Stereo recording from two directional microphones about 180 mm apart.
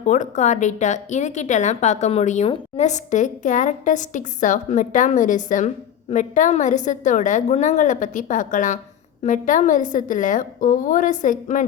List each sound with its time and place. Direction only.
0.0 s a woman's voice: 45° left (ahead or behind)